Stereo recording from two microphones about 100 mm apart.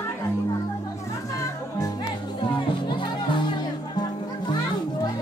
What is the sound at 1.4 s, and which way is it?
Music, 35° left (ahead or behind).